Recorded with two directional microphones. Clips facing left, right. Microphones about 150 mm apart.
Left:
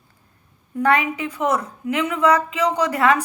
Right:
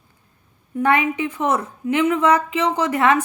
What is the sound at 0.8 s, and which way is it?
A woman's voice, 25° right (ahead or behind).